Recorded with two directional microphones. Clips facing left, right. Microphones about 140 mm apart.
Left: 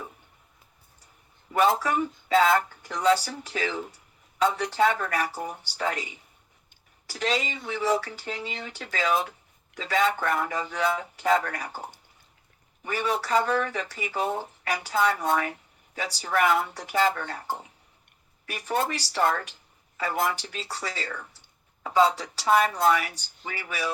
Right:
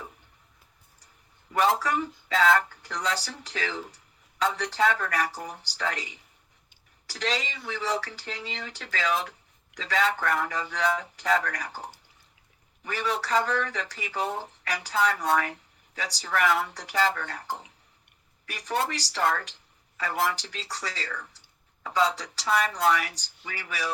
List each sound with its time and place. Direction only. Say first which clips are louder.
1.8 s speech: left 2 dB; 25° left (ahead or behind)
18.9 s speech: left 2 dB; 25° left (ahead or behind)